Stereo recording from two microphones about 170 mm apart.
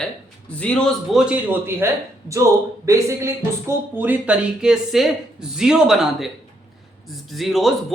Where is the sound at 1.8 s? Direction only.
15° right (ahead or behind).